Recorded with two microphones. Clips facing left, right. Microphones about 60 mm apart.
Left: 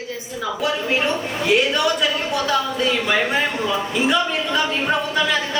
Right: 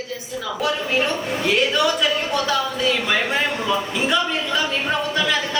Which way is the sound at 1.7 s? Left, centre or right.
Centre.